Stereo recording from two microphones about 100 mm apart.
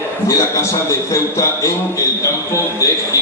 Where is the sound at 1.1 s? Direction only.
30° left (ahead or behind).